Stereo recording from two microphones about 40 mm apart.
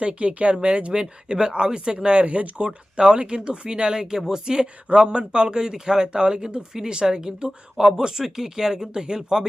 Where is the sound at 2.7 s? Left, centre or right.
Centre.